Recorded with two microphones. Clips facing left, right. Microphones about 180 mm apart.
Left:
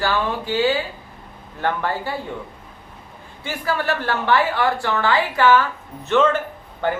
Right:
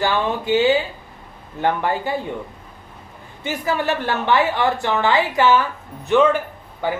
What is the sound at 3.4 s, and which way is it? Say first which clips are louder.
A woman's voice: right 2 dB; 20° right (ahead or behind).